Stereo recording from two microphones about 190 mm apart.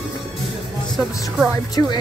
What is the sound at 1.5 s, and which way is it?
Speech, 20° left (ahead or behind).